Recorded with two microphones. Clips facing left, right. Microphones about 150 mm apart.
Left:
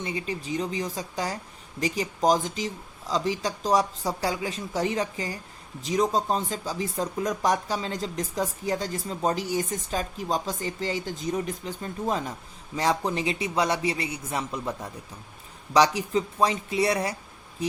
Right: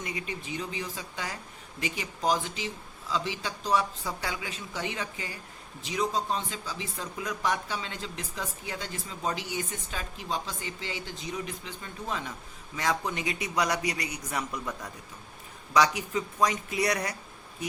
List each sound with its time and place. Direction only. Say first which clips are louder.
0.0 s a man's voice: left 5 dB; 30° left (ahead or behind)